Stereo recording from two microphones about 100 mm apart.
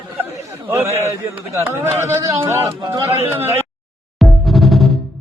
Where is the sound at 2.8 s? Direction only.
35° right (ahead or behind).